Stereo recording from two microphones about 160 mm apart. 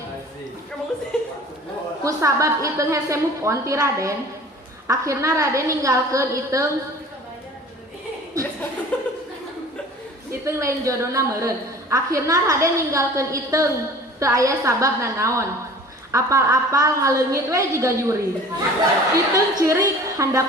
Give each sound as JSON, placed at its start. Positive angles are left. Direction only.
{"t": 1.1, "sound": "a sound", "side_deg": 5}
{"t": 2.0, "sound": "a woman's voice", "side_deg": -20}
{"t": 8.9, "sound": "chuckle", "side_deg": 10}
{"t": 10.4, "sound": "a woman's voice", "side_deg": -20}